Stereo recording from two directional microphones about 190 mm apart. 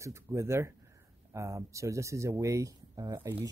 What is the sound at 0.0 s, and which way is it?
Speech, 15° right (ahead or behind).